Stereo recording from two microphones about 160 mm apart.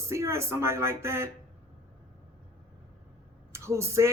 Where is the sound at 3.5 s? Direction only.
15° right (ahead or behind).